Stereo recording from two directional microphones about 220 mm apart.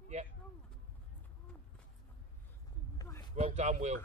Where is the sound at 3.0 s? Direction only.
15° left (ahead or behind).